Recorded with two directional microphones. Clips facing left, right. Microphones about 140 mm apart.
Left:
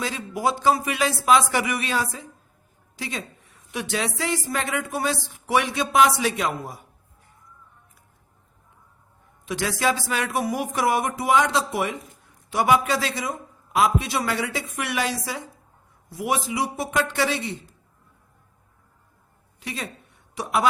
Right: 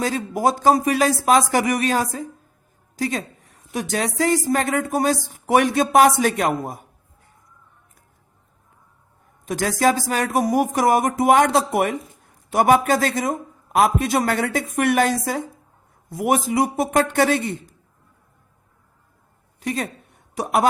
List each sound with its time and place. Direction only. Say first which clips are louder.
0.0 s a woman's voice: right 5 dB; 45° right (ahead or behind)
9.5 s speech: right 5 dB; 45° right (ahead or behind)
19.5 s a sound: right 8 dB; 45° right (ahead or behind)